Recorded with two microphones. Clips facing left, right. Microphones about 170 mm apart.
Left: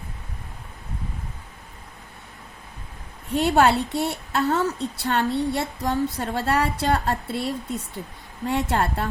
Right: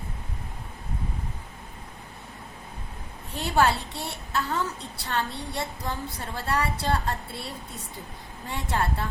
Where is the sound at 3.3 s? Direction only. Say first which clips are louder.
Left 5 dB; 65° left (ahead or behind).